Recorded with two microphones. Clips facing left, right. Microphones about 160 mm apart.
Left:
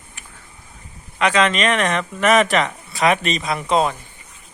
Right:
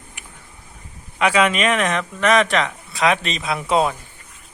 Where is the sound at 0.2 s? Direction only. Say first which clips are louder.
Even; 15° right (ahead or behind).